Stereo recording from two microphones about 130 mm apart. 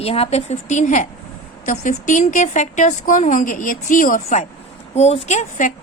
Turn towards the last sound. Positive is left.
turn(degrees=70)  # may be behind; listen again after turning